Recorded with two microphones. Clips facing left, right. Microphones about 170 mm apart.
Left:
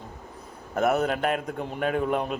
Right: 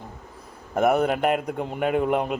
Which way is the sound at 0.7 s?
10° right (ahead or behind).